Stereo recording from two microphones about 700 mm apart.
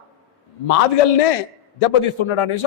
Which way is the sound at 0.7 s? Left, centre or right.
Left.